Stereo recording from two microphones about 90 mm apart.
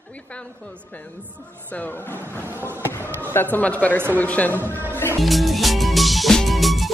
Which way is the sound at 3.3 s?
20° left (ahead or behind).